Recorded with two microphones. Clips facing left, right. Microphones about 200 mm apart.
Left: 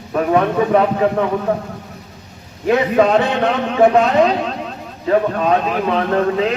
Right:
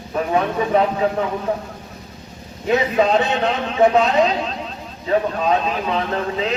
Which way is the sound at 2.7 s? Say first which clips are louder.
Left 3 dB; 55° left (ahead or behind).